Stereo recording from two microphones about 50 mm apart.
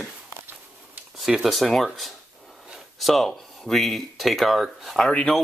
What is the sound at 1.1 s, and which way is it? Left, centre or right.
Speech, centre.